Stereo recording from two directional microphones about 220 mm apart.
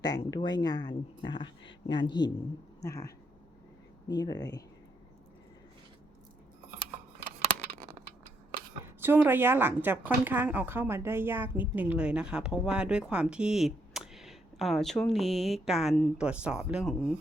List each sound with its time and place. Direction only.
0.0 s speech: 15° left (ahead or behind)
4.1 s speech: 20° left (ahead or behind)
9.0 s speech: 10° right (ahead or behind)